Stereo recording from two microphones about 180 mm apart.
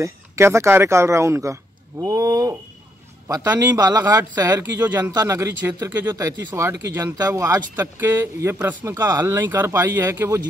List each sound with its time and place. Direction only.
0.0 s speech: 15° right (ahead or behind)